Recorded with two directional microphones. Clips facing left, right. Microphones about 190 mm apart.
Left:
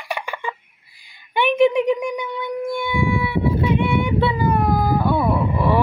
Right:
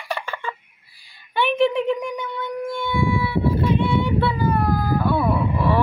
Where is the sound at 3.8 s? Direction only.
15° left (ahead or behind).